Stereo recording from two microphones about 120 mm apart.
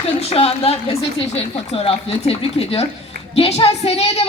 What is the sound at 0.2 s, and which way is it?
Speech, 55° left (ahead or behind).